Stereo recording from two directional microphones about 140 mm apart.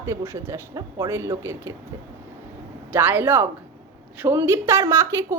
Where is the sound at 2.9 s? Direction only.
15° right (ahead or behind).